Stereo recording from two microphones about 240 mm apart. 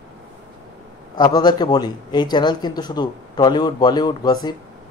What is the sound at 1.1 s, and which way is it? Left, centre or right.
Speech, centre.